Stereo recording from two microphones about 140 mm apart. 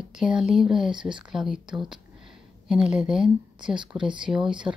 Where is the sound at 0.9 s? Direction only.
35° right (ahead or behind).